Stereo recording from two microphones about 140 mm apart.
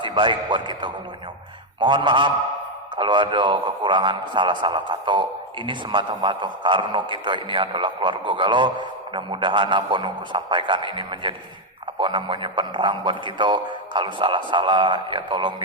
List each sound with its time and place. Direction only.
0.0 s a man's voice: 35° right (ahead or behind)